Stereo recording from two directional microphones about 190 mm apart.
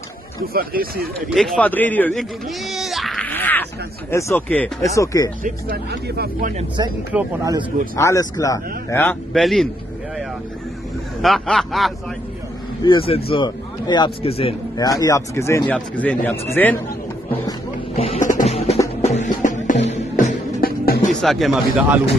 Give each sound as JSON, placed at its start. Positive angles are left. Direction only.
{"t": 0.5, "sound": "speech", "side_deg": -50}
{"t": 1.3, "sound": "speech", "side_deg": 0}
{"t": 5.4, "sound": "speech", "side_deg": -55}
{"t": 6.8, "sound": "speech", "side_deg": -20}
{"t": 8.0, "sound": "speech", "side_deg": 15}
{"t": 9.3, "sound": "speech", "side_deg": 0}
{"t": 11.1, "sound": "speech", "side_deg": 0}
{"t": 12.8, "sound": "speech", "side_deg": 30}
{"t": 14.8, "sound": "speech", "side_deg": 20}
{"t": 17.9, "sound": "music", "side_deg": 35}
{"t": 20.6, "sound": "music", "side_deg": 50}
{"t": 21.1, "sound": "speech", "side_deg": 0}